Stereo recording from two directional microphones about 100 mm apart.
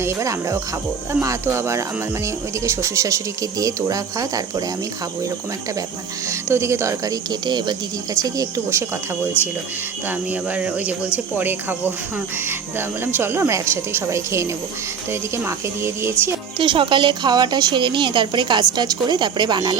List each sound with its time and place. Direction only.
0.0 s a woman's voice: 30° right (ahead or behind)
6.2 s speech: 30° right (ahead or behind); by 7.8 s 45° right (ahead or behind)
8.1 s speech: 35° right (ahead or behind)
10.1 s a woman's voice: 15° right (ahead or behind)
13.1 s a woman's voice: 25° right (ahead or behind)
16.6 s a woman's voice: 60° right (ahead or behind)